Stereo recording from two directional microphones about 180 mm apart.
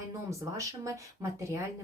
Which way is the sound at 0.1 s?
15° right (ahead or behind).